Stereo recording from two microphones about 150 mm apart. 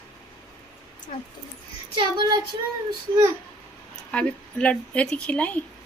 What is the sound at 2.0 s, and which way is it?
Child singing, 30° right (ahead or behind).